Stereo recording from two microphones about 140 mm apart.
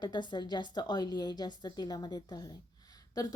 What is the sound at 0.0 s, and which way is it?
A woman's voice, 35° left (ahead or behind).